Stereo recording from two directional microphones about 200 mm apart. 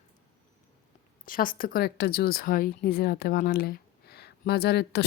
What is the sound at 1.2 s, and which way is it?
A woman's voice, 45° left (ahead or behind).